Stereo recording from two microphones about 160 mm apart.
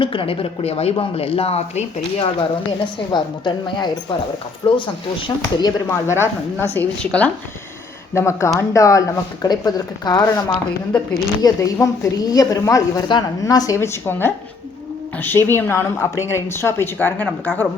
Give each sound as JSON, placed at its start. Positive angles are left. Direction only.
{"t": 0.0, "sound": "speech", "side_deg": 30}
{"t": 3.1, "sound": "a woman's voice", "side_deg": 25}
{"t": 6.1, "sound": "a woman's voice", "side_deg": 15}
{"t": 11.4, "sound": "a woman's voice", "side_deg": 25}